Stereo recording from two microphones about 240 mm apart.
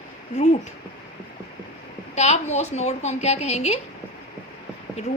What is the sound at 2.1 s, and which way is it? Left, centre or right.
A child's voice, left.